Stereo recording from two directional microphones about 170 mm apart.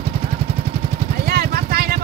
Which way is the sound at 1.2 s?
65° right (ahead or behind).